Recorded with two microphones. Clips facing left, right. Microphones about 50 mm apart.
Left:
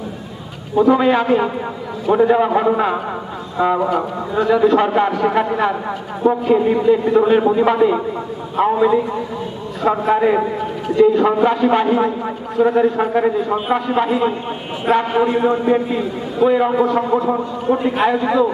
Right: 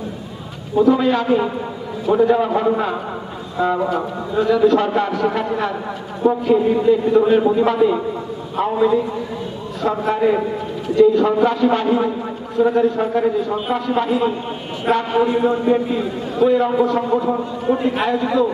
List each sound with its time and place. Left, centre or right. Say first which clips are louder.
0.8 s a man's voice: left 2 dB; left
13.7 s a man's voice: left 2 dB; centre
15.3 s a man's voice: left 1 dB; left
15.6 s a man's voice: left 1 dB; centre
18.1 s a man's voice: left 2 dB; centre